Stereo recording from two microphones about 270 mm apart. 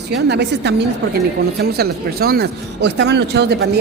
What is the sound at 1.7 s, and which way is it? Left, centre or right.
Speech, right.